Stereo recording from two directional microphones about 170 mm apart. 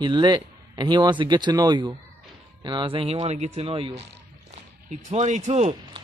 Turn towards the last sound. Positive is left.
turn(degrees=-40)  # may be behind; listen again after turning